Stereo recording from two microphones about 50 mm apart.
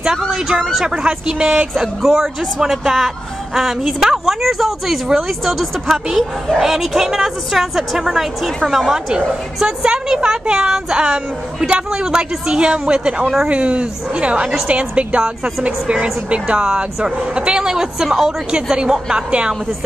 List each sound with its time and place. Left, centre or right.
0.7 s speech: centre
8.0 s speech: centre
10.0 s a woman's voice: centre